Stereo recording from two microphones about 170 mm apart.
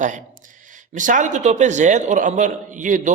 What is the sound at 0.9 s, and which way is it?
A man's voice, 50° right (ahead or behind).